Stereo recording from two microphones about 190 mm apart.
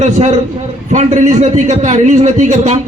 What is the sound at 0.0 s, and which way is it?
A man's voice, 40° right (ahead or behind).